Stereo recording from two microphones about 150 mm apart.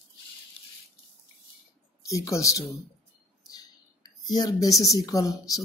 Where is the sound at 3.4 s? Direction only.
25° left (ahead or behind).